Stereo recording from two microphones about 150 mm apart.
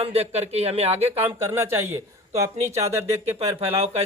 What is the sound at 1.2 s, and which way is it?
Speech, 15° right (ahead or behind).